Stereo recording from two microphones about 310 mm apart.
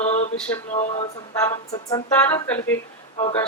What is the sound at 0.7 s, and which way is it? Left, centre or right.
Female singing, left.